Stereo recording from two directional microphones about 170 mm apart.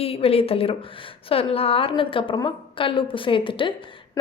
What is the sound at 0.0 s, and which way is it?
A woman's voice, 35° left (ahead or behind).